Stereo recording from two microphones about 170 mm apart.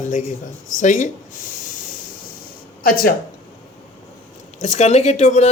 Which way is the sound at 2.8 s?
60° left (ahead or behind).